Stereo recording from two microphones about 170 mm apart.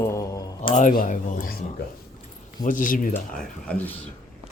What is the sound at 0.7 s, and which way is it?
Speech, 50° left (ahead or behind).